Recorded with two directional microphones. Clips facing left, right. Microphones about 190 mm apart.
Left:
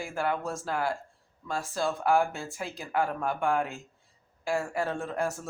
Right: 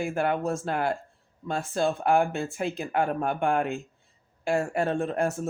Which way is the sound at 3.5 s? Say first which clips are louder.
Right 3 dB; 60° right (ahead or behind).